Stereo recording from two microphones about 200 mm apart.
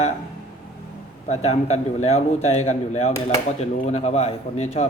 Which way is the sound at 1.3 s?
35° left (ahead or behind).